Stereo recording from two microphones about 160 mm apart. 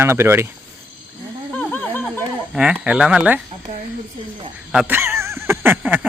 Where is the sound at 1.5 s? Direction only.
10° left (ahead or behind).